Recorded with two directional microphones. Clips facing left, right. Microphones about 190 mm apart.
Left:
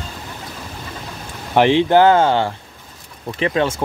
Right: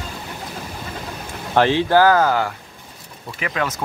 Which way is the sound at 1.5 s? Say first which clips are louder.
Left 3 dB; 20° left (ahead or behind).